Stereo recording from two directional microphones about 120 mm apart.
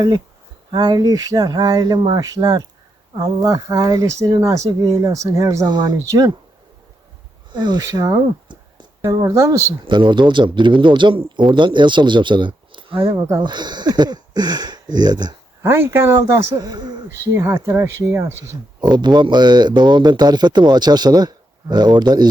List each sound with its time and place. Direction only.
0.7 s a man's voice: 35° right (ahead or behind)
7.5 s a man's voice: 35° right (ahead or behind)
9.8 s a man's voice: 45° right (ahead or behind)
15.6 s a man's voice: 20° right (ahead or behind); by 17.0 s 35° right (ahead or behind)
17.3 s speech: 20° right (ahead or behind)
18.8 s a man's voice: 40° right (ahead or behind)